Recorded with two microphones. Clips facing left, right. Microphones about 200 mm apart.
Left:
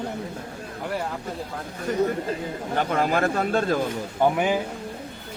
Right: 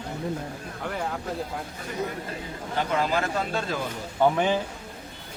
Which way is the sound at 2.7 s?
50° left (ahead or behind).